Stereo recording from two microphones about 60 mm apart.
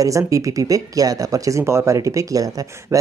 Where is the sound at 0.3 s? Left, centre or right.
Right.